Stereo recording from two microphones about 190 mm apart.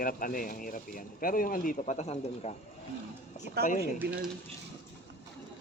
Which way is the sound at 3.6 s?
45° left (ahead or behind).